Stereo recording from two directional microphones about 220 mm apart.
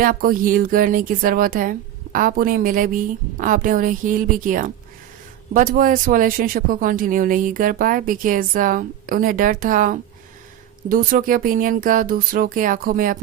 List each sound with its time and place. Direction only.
0.0 s speech: 40° right (ahead or behind)